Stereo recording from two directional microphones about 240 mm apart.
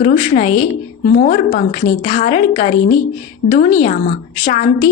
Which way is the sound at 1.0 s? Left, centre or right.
Left.